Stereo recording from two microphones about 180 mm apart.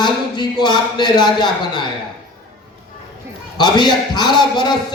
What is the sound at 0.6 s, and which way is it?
A man's voice, 25° left (ahead or behind).